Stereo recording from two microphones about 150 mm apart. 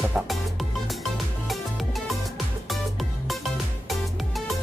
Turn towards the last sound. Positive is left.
turn(degrees=0)  # may be behind; listen again after turning